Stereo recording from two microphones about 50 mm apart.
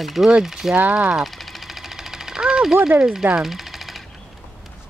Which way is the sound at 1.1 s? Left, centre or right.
Centre.